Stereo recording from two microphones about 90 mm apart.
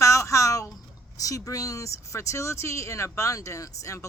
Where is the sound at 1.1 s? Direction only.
40° left (ahead or behind).